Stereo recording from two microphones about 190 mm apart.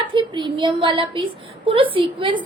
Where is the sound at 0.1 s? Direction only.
25° right (ahead or behind).